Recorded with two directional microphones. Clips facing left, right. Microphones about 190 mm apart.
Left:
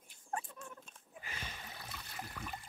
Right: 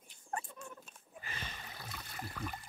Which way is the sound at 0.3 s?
Centre (ahead or behind).